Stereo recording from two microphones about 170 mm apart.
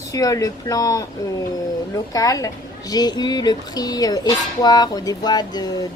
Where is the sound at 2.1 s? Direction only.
20° left (ahead or behind).